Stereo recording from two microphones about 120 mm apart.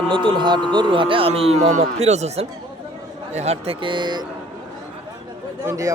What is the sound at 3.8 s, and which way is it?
Speech, 40° right (ahead or behind).